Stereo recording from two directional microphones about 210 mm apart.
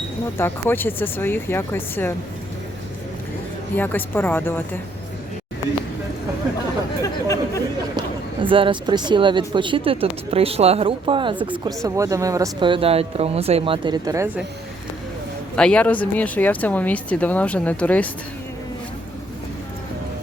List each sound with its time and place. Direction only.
0.3 s speech: 10° left (ahead or behind)
3.8 s speech: 10° left (ahead or behind)
7.0 s speech: 15° left (ahead or behind)
7.9 s speech: 25° right (ahead or behind)
11.3 s speech: 5° right (ahead or behind)
15.5 s speech: 5° left (ahead or behind)